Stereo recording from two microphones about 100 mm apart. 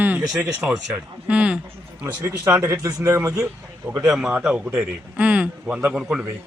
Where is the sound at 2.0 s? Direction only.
25° right (ahead or behind).